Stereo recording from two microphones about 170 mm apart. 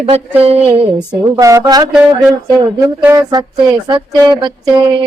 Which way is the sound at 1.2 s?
20° right (ahead or behind).